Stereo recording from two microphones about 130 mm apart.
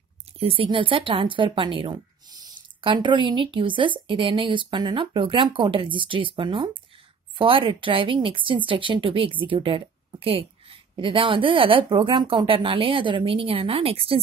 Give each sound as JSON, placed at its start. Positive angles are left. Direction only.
{"t": 0.4, "sound": "a woman's voice", "side_deg": -45}